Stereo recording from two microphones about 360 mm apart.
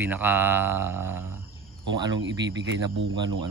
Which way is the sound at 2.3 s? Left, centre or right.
Right.